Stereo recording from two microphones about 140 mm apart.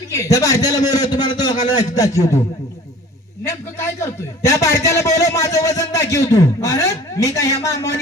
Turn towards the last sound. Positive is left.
turn(degrees=25)  # may be behind; listen again after turning